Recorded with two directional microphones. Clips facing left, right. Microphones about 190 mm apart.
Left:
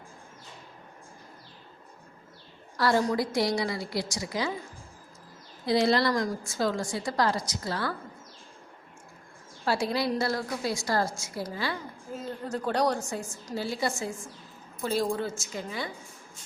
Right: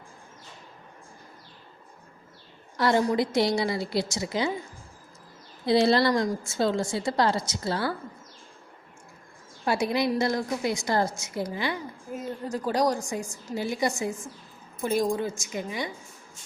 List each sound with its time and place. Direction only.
2.7 s a woman's voice: 20° right (ahead or behind)
5.6 s a woman's voice: 30° right (ahead or behind)
9.6 s a woman's voice: 20° right (ahead or behind)